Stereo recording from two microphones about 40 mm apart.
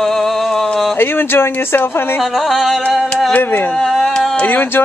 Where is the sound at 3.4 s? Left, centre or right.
Left.